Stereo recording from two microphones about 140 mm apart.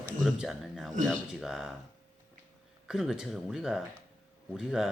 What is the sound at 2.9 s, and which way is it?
Speech, 5° right (ahead or behind).